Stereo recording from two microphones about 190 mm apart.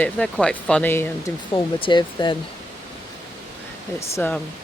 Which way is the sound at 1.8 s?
25° left (ahead or behind).